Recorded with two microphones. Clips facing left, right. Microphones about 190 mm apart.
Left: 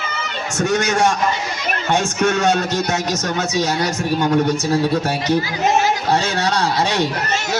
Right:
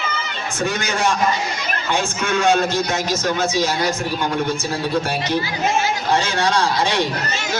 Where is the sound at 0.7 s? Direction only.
45° left (ahead or behind).